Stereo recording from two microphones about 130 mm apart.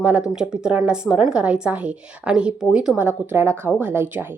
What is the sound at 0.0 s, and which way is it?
A woman's voice, 5° right (ahead or behind).